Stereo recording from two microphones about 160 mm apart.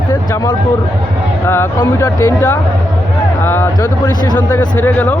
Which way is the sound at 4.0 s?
25° left (ahead or behind).